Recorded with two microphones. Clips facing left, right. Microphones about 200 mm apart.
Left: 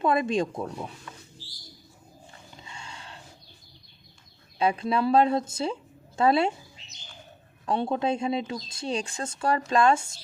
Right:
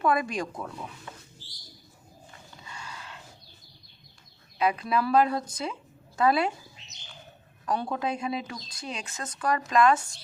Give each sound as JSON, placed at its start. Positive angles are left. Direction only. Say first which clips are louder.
{"t": 0.0, "sound": "speech", "louder": "left 3 dB", "side_deg": 25}
{"t": 2.6, "sound": "a sound", "louder": "right 1 dB", "side_deg": 25}
{"t": 4.5, "sound": "speech", "louder": "left 1 dB", "side_deg": 30}
{"t": 7.6, "sound": "speech", "louder": "left 3 dB", "side_deg": 25}